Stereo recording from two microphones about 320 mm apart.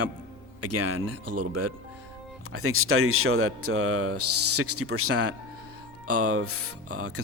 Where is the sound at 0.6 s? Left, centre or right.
Right.